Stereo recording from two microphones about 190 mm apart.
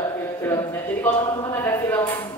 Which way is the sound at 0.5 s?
15° left (ahead or behind).